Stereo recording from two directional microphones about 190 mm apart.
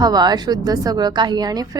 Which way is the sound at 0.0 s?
20° right (ahead or behind).